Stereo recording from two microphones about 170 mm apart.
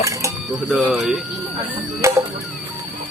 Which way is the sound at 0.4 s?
Centre (ahead or behind).